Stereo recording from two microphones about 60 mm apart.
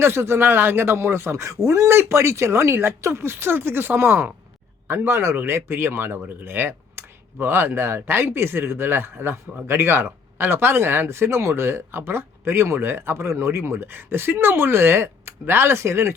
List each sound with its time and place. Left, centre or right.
0.0 s speech: right